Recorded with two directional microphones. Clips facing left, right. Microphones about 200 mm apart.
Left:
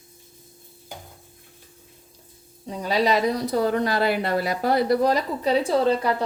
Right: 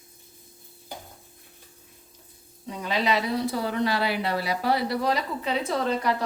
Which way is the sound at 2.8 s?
40° left (ahead or behind).